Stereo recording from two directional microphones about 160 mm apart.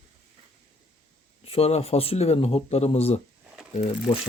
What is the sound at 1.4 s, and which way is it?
Speech, 40° left (ahead or behind).